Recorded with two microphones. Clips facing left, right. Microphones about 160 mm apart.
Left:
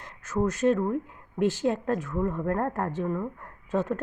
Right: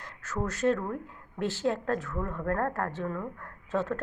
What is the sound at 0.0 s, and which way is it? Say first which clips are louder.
A woman's voice: left 6 dB; 15° left (ahead or behind).